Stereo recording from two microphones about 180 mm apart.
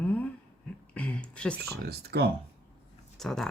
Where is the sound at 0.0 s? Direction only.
5° left (ahead or behind).